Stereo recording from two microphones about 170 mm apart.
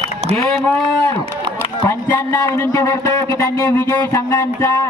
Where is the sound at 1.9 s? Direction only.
15° left (ahead or behind).